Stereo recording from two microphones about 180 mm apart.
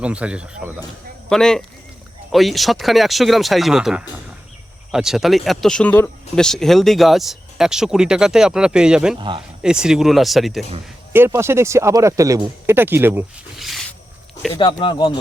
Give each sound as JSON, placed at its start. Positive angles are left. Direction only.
{"t": 0.0, "sound": "speech", "side_deg": -5}
{"t": 9.1, "sound": "speech", "side_deg": -25}
{"t": 9.6, "sound": "speech", "side_deg": -5}
{"t": 11.1, "sound": "speech", "side_deg": -15}
{"t": 13.6, "sound": "a sound", "side_deg": 0}
{"t": 14.6, "sound": "speech", "side_deg": 25}